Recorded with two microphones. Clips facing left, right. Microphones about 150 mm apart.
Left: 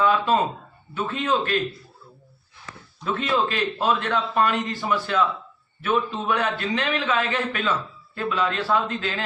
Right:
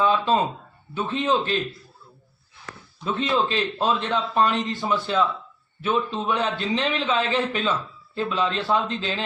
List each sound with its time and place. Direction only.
0.0 s a man's voice: 20° right (ahead or behind)
3.0 s a man's voice: 20° right (ahead or behind)